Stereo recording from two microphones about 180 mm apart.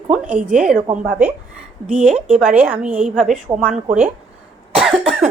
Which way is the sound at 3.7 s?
40° right (ahead or behind).